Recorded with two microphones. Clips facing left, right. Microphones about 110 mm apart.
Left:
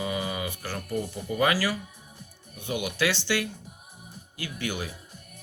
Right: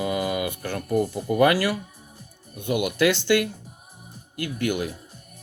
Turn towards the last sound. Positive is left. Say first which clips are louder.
# right 7 dB
turn(degrees=-50)  # may be behind; listen again after turning